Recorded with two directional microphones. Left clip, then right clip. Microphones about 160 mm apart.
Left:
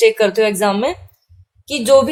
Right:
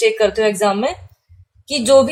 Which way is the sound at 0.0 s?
50° left (ahead or behind).